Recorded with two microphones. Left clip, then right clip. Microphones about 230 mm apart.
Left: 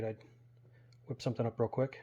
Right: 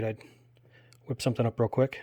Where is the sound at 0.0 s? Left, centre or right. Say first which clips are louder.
Right 6 dB; right.